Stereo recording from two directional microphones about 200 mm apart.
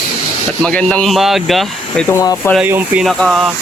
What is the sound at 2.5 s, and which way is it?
Speech, 10° right (ahead or behind).